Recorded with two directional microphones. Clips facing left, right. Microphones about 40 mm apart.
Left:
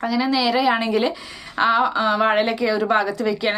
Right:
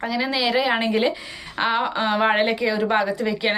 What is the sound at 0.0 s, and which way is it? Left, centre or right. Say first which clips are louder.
Speech: left 3 dB; centre.